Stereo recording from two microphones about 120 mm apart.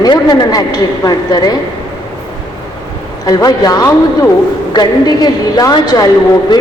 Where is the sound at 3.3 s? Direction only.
30° left (ahead or behind).